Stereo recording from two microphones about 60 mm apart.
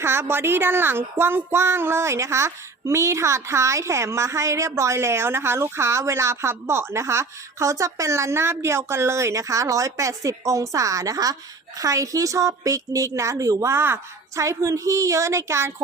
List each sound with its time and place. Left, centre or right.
0.0 s speech: right
11.8 s a woman's voice: right
13.7 s a woman's voice: right